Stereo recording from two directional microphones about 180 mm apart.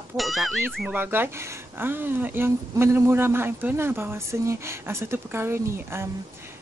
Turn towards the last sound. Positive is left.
turn(degrees=-15)  # may be behind; listen again after turning